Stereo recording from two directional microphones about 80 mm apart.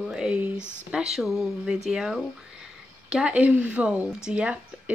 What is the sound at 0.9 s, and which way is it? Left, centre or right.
Speech, centre.